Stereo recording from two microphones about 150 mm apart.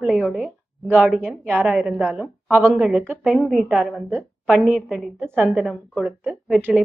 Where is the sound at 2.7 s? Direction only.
Centre (ahead or behind).